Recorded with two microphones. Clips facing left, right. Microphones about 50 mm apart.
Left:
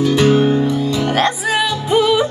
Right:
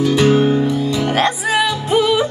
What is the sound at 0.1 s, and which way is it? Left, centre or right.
Music, right.